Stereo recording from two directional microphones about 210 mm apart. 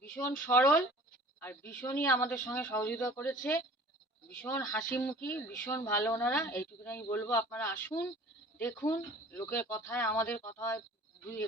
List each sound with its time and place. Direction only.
0.1 s speech: 10° left (ahead or behind)